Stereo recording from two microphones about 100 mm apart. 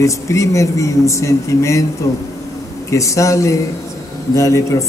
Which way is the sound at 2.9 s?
30° left (ahead or behind).